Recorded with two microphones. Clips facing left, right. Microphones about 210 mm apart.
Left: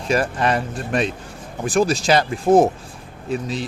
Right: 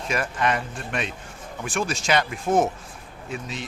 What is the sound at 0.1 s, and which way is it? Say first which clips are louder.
Speech: left 6 dB; 35° left (ahead or behind).